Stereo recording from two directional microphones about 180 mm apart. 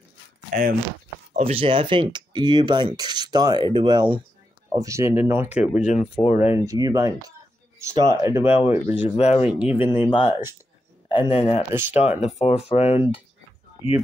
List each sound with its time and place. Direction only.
1.3 s speech: 30° right (ahead or behind); by 5.7 s 10° right (ahead or behind)
5.8 s speech: 35° left (ahead or behind)
6.5 s speech: 20° right (ahead or behind)
9.1 s speech: 35° left (ahead or behind)
9.5 s speech: 5° right (ahead or behind)
9.8 s speech: 25° left (ahead or behind)
11.7 s speech: 10° right (ahead or behind)
12.2 s speech: 35° left (ahead or behind)